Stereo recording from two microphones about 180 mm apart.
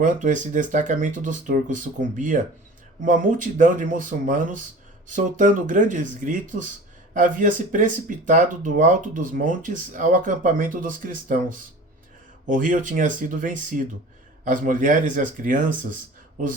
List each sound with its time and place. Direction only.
0.0 s speech: 45° right (ahead or behind)